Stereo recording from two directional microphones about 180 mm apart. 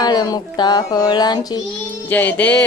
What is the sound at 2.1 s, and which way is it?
Music, 10° left (ahead or behind).